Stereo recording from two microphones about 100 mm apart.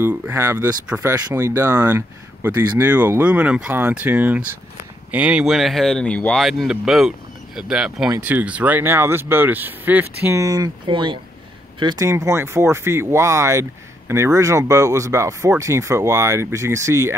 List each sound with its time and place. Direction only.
0.0 s speech: 25° right (ahead or behind); by 5.5 s 10° right (ahead or behind)
5.5 s speech: centre (ahead or behind)
6.4 s speech: 5° right (ahead or behind); by 10.3 s 20° right (ahead or behind)
10.3 s speech: 35° right (ahead or behind)
10.9 s speech: 50° right (ahead or behind)
12.0 s speech: 30° right (ahead or behind)